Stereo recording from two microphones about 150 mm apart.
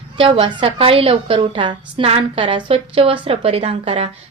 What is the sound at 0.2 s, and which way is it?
A woman's voice, 35° right (ahead or behind).